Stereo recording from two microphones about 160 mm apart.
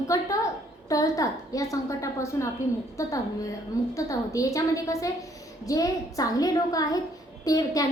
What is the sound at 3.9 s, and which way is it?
A woman's voice, 20° left (ahead or behind).